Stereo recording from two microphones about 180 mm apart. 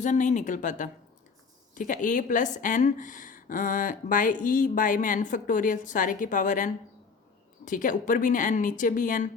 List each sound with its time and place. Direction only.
0.0 s speech: 45° left (ahead or behind)